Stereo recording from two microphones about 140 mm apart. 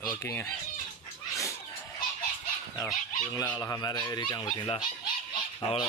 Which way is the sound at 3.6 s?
25° left (ahead or behind).